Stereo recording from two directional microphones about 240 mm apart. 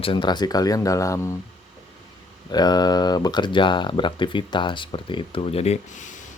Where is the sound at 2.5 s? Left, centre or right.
Centre.